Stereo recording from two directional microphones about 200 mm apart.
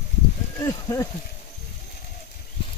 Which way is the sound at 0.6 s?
15° left (ahead or behind).